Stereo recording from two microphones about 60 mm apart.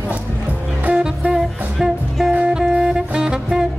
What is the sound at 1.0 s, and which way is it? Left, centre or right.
Music, centre.